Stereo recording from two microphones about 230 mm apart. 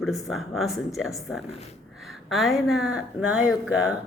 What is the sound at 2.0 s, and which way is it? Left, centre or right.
Speech, centre.